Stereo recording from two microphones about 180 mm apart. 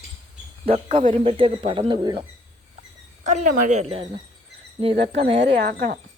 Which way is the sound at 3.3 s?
40° right (ahead or behind).